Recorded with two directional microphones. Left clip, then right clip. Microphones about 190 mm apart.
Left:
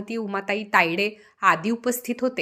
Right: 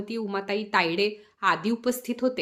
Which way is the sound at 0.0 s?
15° left (ahead or behind).